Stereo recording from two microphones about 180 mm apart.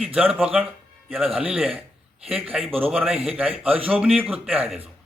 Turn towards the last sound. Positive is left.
turn(degrees=-5)  # may be behind; listen again after turning